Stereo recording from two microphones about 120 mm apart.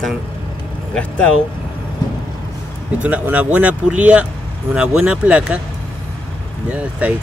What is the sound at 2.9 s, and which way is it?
A man's voice, 10° right (ahead or behind).